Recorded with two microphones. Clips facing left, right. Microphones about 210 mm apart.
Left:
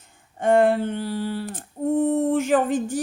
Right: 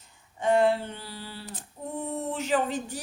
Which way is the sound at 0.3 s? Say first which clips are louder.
Left 5 dB; 50° left (ahead or behind).